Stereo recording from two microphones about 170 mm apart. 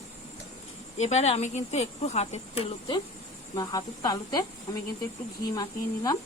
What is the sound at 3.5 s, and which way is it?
Speech, 20° left (ahead or behind).